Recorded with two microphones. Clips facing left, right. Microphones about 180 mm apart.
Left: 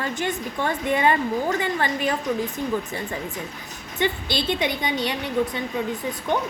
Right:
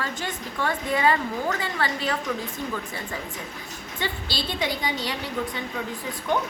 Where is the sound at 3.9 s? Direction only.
20° left (ahead or behind).